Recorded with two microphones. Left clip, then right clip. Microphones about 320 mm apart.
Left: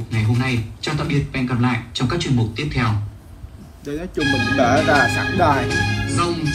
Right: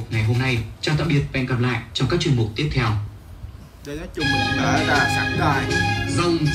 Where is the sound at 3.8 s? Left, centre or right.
Centre.